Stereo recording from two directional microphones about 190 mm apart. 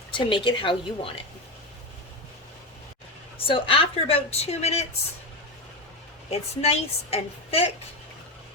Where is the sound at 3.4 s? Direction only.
30° left (ahead or behind).